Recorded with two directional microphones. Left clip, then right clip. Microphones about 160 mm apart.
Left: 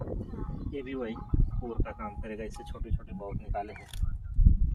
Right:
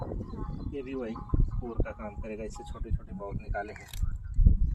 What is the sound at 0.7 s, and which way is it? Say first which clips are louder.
Speech: even; 10° left (ahead or behind).